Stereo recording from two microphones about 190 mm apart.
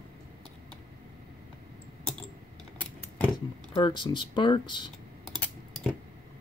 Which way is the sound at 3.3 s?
25° left (ahead or behind).